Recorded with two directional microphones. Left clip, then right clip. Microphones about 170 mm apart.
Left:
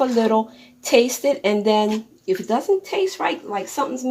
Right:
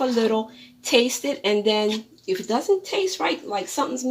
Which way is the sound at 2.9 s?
15° left (ahead or behind).